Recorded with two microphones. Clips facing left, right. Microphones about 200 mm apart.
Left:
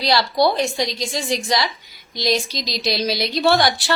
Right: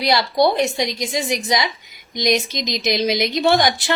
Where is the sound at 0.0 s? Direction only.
20° right (ahead or behind).